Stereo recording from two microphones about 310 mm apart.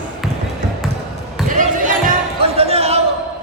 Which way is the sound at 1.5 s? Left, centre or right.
Right.